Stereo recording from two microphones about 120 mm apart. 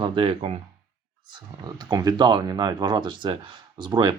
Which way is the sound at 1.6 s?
35° right (ahead or behind).